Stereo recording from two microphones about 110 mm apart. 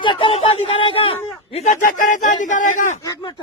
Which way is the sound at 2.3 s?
90° left.